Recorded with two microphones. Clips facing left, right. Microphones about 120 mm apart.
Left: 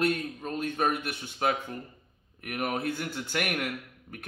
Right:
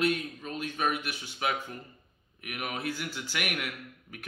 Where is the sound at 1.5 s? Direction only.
30° left (ahead or behind).